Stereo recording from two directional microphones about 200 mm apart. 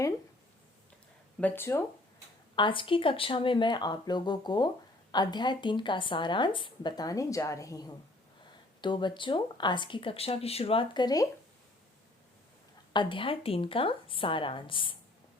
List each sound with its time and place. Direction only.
1.4 s speech: 10° left (ahead or behind)
2.6 s a woman's voice: 25° left (ahead or behind)
12.9 s a woman's voice: 25° left (ahead or behind)